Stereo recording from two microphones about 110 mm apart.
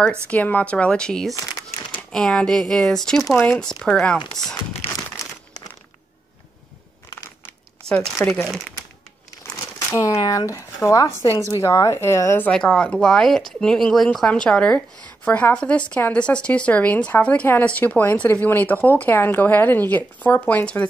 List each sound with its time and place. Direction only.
0.3 s a woman's voice: 15° left (ahead or behind)
4.4 s a sound: 5° left (ahead or behind)
8.3 s a woman's voice: 5° left (ahead or behind)
9.8 s speech: 25° left (ahead or behind)
12.4 s a woman's voice: 10° left (ahead or behind)